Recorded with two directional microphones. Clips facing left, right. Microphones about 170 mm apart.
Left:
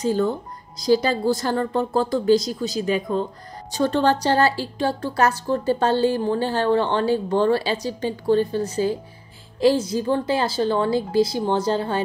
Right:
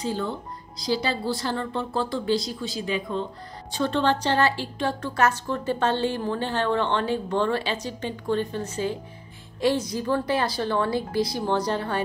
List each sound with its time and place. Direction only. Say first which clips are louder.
0.0 s a woman's voice: left 7 dB; 45° left (ahead or behind); by 12.0 s 25° left (ahead or behind)